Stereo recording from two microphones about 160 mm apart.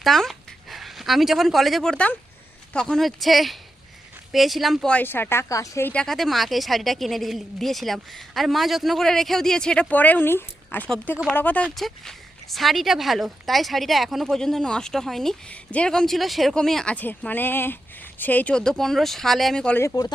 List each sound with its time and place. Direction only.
0.0 s speech: centre (ahead or behind); by 5.9 s 20° left (ahead or behind)
5.9 s speech: 5° left (ahead or behind)
19.8 s speech: 20° left (ahead or behind)